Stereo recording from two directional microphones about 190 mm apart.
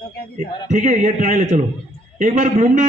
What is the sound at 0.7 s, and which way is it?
A man's voice, 40° right (ahead or behind).